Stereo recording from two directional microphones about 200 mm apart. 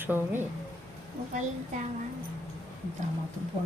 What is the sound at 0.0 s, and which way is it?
Speech, 10° right (ahead or behind).